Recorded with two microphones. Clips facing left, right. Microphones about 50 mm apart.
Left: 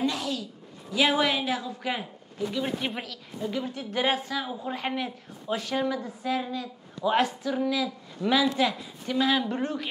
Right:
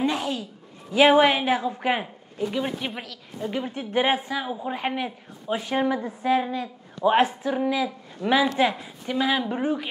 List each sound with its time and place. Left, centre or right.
0.0 s a sound: right
0.9 s a woman's voice: right
2.6 s speech: centre
3.3 s a woman's voice: right